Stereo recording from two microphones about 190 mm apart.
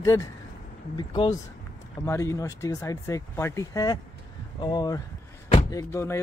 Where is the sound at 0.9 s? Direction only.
25° left (ahead or behind).